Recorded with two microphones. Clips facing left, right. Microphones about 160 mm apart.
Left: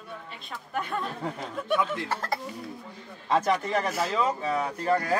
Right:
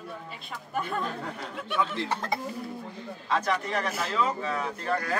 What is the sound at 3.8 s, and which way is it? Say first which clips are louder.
Speech: left 2 dB; 35° left (ahead or behind).